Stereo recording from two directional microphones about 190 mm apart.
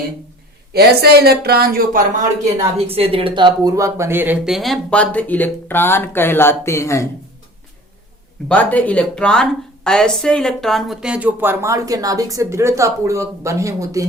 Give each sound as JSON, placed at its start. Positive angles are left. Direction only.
{"t": 0.7, "sound": "speech", "side_deg": -55}
{"t": 2.7, "sound": "speech", "side_deg": -30}
{"t": 8.4, "sound": "speech", "side_deg": 10}